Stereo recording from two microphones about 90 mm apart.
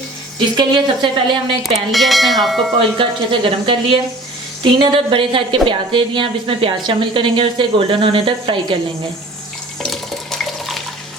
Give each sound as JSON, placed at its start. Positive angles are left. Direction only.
{"t": 0.3, "sound": "a woman's voice", "side_deg": -60}
{"t": 1.6, "sound": "bell", "side_deg": 0}
{"t": 3.0, "sound": "a woman's voice", "side_deg": -75}
{"t": 9.8, "sound": "water", "side_deg": 5}